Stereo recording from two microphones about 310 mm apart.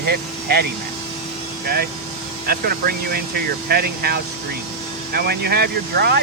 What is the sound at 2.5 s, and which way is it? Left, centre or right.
Speech, right.